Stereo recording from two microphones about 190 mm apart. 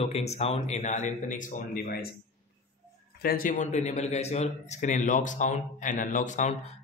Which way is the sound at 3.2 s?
45° left (ahead or behind).